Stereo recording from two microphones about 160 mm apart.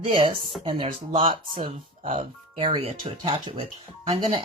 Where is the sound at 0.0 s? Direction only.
30° right (ahead or behind).